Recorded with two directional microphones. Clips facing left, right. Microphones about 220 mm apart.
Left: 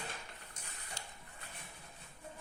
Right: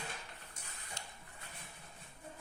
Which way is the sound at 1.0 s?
35° left (ahead or behind).